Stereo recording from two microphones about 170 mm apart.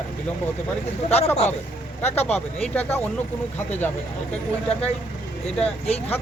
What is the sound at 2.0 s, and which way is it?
Speech, 10° left (ahead or behind).